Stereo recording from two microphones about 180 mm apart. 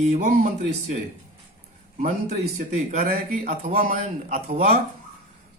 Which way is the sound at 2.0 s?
50° right (ahead or behind).